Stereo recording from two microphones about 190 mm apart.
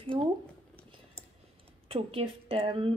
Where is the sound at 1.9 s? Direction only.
30° right (ahead or behind).